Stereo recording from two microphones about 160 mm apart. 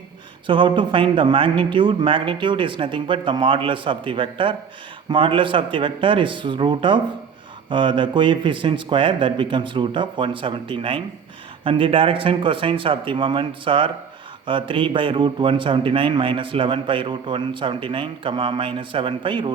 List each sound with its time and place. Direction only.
0.4 s a man's voice: 30° right (ahead or behind)